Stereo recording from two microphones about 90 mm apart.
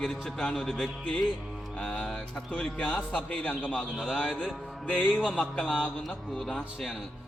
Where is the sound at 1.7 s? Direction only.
15° left (ahead or behind).